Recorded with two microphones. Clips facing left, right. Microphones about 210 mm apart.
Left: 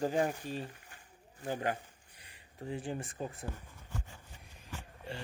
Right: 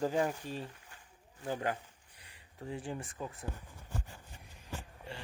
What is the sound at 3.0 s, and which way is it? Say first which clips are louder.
Speech: left 2 dB; 40° left (ahead or behind).